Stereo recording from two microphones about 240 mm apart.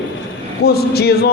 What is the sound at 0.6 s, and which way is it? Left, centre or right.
Speech, left.